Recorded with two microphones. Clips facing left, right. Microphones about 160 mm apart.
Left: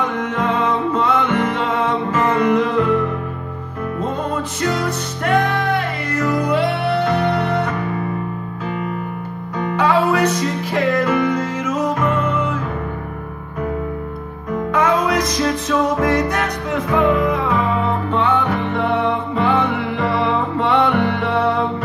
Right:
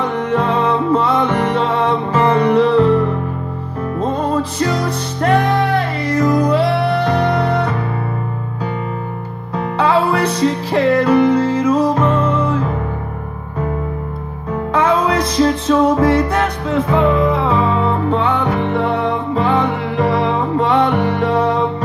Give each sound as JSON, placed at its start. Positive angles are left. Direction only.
{"t": 0.0, "sound": "music", "side_deg": -30}
{"t": 9.8, "sound": "music", "side_deg": -30}
{"t": 14.7, "sound": "music", "side_deg": -30}